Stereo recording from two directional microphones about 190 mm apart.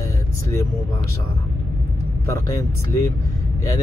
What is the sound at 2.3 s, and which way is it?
Speech, 15° left (ahead or behind).